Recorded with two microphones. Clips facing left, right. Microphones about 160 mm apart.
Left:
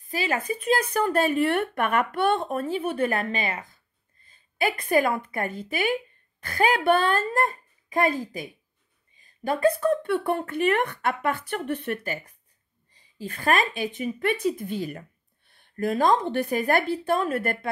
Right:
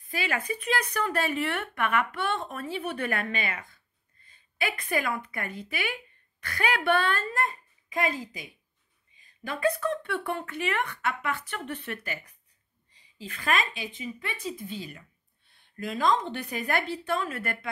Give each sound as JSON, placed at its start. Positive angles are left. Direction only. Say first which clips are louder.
{"t": 0.1, "sound": "speech", "louder": "left 4 dB", "side_deg": 40}
{"t": 3.0, "sound": "a woman's voice", "louder": "left 5 dB", "side_deg": 30}
{"t": 4.3, "sound": "a sound", "louder": "left 6 dB", "side_deg": 45}
{"t": 5.3, "sound": "speech", "louder": "left 6 dB", "side_deg": 45}
{"t": 9.7, "sound": "speech", "louder": "left 5 dB", "side_deg": 45}